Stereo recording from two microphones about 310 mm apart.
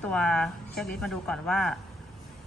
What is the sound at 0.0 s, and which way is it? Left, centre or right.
A woman's voice, centre.